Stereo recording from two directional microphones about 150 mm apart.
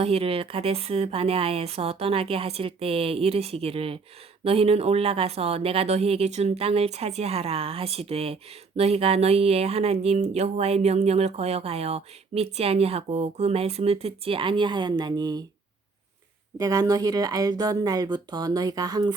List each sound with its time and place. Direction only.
0.0 s speech: 40° right (ahead or behind)
16.6 s speech: 25° right (ahead or behind)